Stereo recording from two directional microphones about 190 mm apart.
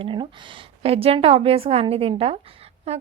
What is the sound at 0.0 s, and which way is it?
A woman's voice, 25° right (ahead or behind).